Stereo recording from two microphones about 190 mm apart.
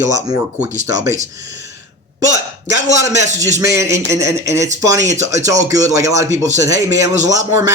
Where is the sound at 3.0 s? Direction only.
15° right (ahead or behind).